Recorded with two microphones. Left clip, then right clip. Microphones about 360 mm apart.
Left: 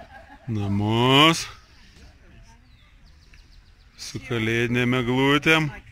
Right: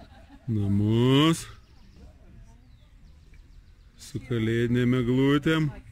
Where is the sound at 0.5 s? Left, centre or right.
Left.